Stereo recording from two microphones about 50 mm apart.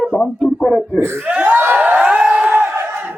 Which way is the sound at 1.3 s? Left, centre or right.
Right.